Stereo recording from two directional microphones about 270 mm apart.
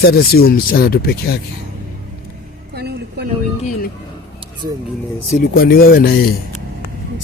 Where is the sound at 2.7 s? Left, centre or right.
Right.